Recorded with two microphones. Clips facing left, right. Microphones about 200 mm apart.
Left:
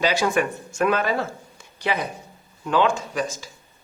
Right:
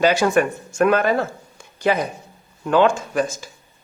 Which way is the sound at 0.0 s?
50° right (ahead or behind).